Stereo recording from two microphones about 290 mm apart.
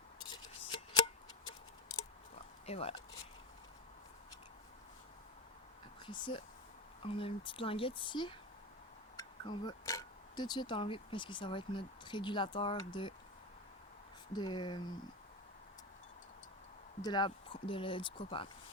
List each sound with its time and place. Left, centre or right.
0.2 s scissors: centre
2.3 s a sound: left
6.1 s speech: centre
14.3 s speech: centre
17.0 s speech: centre